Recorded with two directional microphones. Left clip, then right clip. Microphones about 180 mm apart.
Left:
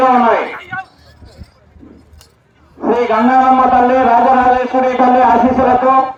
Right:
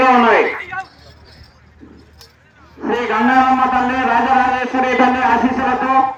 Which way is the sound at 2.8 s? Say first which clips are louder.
Left 4 dB; 40° left (ahead or behind).